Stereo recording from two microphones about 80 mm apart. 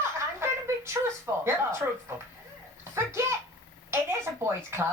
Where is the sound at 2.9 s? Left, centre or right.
Right.